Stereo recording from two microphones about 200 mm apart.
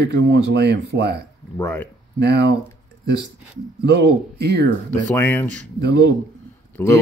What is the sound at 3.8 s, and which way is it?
Speech, 55° right (ahead or behind).